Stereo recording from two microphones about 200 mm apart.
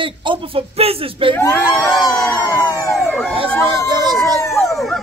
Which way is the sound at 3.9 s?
20° right (ahead or behind).